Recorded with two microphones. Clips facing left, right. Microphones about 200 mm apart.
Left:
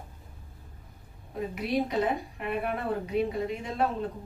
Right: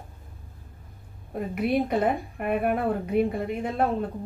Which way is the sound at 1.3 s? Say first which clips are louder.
Right 4 dB; 55° right (ahead or behind).